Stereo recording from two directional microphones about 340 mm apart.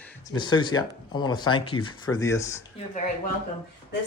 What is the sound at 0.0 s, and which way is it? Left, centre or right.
Speech, centre.